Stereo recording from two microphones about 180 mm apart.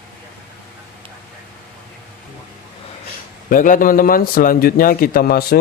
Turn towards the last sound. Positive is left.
turn(degrees=60)  # may be behind; listen again after turning